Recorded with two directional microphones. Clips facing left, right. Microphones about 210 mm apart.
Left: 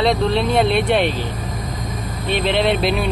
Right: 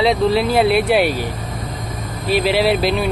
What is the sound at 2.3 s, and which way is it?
Speech, 5° right (ahead or behind).